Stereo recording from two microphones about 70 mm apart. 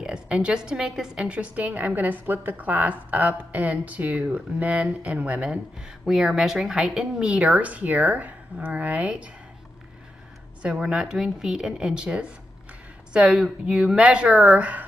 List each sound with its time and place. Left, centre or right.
0.0 s a woman's voice: centre
10.6 s speech: centre